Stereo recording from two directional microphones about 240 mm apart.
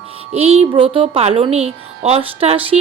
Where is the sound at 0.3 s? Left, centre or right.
Right.